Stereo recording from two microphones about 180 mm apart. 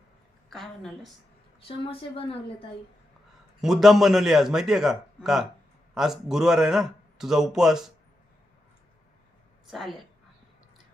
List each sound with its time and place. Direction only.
0.5 s a man's voice: centre (ahead or behind)
1.6 s a woman's voice: 30° left (ahead or behind)
3.6 s a man's voice: centre (ahead or behind)
9.6 s a woman's voice: centre (ahead or behind)